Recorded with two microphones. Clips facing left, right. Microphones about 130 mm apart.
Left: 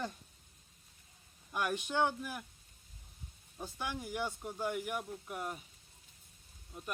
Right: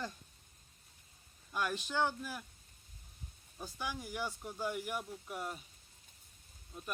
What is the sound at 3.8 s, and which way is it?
Speech, 20° left (ahead or behind).